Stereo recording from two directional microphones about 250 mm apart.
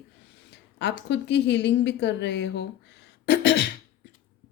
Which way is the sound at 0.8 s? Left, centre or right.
Left.